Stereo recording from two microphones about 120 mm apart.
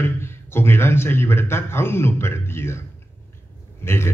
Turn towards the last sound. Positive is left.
turn(degrees=20)  # may be behind; listen again after turning